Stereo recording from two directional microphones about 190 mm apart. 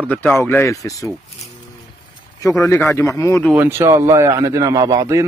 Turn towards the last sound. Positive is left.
turn(degrees=-15)  # may be behind; listen again after turning